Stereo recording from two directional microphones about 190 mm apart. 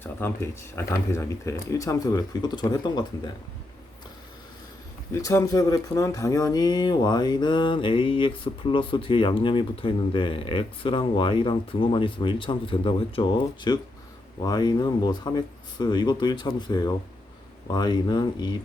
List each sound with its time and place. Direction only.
0.0 s speech: 10° left (ahead or behind)
5.1 s speech: 15° left (ahead or behind)